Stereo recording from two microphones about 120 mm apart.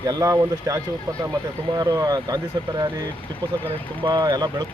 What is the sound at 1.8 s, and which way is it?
Speech, 30° right (ahead or behind).